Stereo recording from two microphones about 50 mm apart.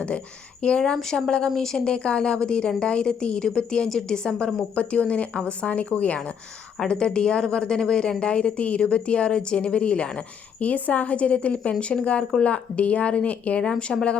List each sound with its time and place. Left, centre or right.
0.6 s a woman's voice: centre
6.7 s a woman's voice: centre